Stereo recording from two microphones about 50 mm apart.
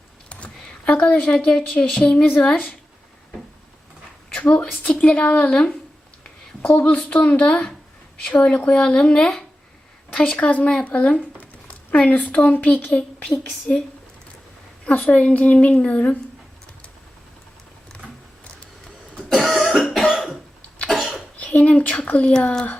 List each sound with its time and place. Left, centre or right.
0.3 s computer keyboard: left
1.2 s a woman's voice: centre
4.4 s a woman's voice: left
6.2 s a sound: left
7.1 s a woman's voice: left
14.8 s speech: left
19.1 s cough: centre
21.3 s a sound: left
22.3 s speech: centre